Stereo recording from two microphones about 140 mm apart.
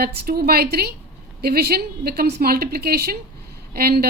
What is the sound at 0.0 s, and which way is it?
Speech, 90° right.